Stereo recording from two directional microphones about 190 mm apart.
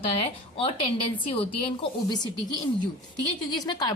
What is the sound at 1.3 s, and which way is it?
A woman's voice, 30° left (ahead or behind).